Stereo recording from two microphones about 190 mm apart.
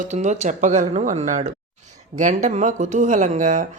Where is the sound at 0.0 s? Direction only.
40° right (ahead or behind).